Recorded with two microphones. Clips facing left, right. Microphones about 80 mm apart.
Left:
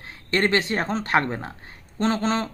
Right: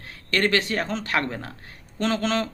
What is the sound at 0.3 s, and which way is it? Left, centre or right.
A man's voice, left.